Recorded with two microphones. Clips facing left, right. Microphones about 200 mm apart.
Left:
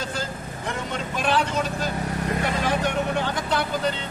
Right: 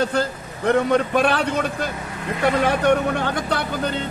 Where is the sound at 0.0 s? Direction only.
60° right (ahead or behind).